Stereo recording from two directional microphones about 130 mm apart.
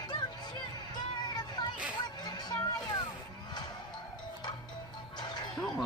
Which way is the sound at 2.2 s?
35° left (ahead or behind).